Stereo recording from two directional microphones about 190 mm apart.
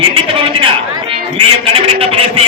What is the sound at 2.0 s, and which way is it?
Speech, 30° right (ahead or behind).